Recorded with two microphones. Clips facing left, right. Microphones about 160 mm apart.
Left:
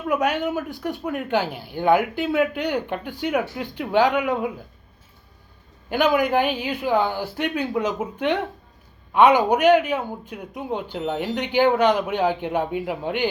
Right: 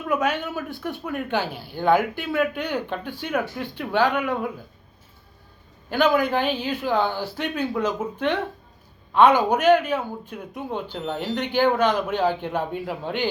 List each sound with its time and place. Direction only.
0.1 s speech: 10° left (ahead or behind)
5.9 s speech: 15° left (ahead or behind)
9.1 s speech: 15° left (ahead or behind)